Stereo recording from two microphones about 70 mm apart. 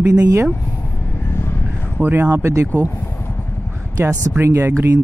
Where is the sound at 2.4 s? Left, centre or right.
Right.